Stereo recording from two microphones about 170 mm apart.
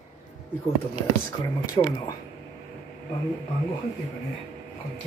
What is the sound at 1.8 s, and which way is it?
Speech, 25° left (ahead or behind).